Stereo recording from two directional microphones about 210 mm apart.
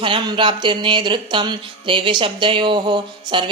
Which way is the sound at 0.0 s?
25° right (ahead or behind).